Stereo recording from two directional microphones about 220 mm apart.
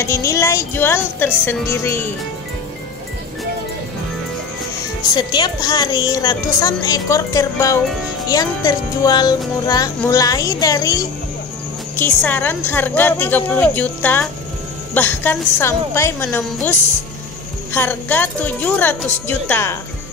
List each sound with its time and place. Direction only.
0.0 s a woman's voice: 15° left (ahead or behind)
5.0 s a woman's voice: 20° left (ahead or behind)
17.7 s a woman's voice: 10° left (ahead or behind)